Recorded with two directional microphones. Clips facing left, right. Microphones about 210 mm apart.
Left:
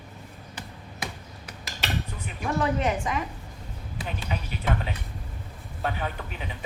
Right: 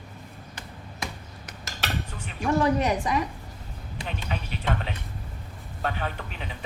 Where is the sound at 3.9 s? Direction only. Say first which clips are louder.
Even; 5° left (ahead or behind).